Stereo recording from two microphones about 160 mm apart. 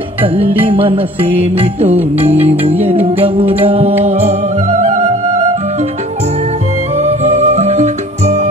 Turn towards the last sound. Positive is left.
turn(degrees=-45)  # may be behind; listen again after turning